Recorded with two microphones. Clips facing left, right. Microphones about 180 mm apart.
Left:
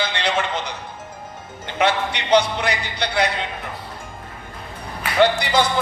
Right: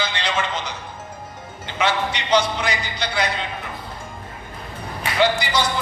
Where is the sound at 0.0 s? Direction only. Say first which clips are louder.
Left 2 dB; 60° left (ahead or behind).